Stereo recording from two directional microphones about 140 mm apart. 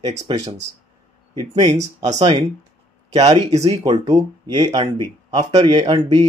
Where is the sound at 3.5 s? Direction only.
30° right (ahead or behind).